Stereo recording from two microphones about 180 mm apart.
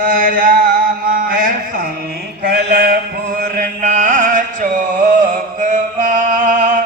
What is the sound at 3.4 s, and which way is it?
Music, 50° right (ahead or behind).